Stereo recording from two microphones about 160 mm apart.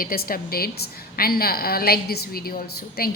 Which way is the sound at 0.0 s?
65° left (ahead or behind).